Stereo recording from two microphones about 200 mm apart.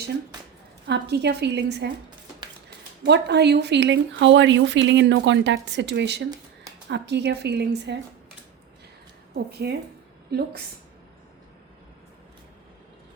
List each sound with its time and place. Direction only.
0.9 s speech: 55° right (ahead or behind)
9.3 s a woman's voice: 55° right (ahead or behind)